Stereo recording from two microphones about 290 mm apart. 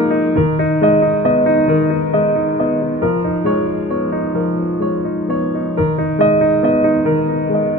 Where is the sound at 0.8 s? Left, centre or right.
Left.